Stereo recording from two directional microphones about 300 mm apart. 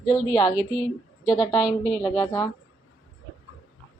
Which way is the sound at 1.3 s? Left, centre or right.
Centre.